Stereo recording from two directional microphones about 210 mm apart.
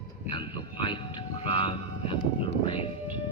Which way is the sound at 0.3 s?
25° left (ahead or behind).